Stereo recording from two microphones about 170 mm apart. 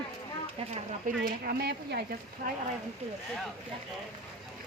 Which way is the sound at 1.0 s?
60° right (ahead or behind).